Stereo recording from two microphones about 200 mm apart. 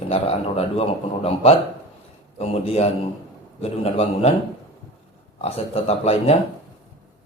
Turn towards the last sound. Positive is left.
turn(degrees=30)  # may be behind; listen again after turning